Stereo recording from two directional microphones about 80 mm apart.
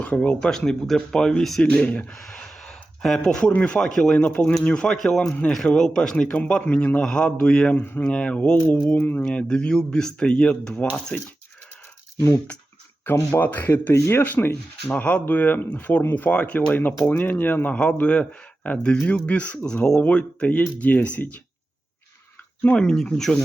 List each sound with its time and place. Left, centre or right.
0.0 s speech: centre
7.8 s speech: left
8.0 s speech: centre
9.0 s speech: left
9.2 s speech: centre
13.1 s speech: left
22.6 s speech: centre